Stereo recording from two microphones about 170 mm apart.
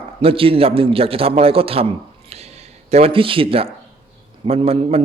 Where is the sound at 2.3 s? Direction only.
40° right (ahead or behind).